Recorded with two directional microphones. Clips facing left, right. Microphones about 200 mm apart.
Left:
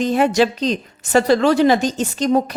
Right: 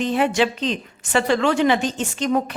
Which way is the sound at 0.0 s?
40° left (ahead or behind).